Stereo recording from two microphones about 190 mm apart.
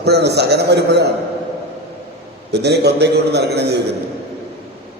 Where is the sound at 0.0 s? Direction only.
60° right (ahead or behind).